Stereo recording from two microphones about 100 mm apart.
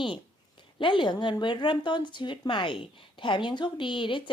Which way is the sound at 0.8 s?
55° left (ahead or behind).